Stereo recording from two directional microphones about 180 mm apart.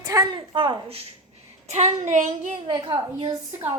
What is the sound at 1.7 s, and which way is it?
Child singing, 40° right (ahead or behind).